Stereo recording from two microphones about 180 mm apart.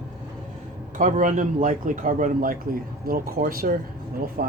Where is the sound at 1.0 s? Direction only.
45° right (ahead or behind).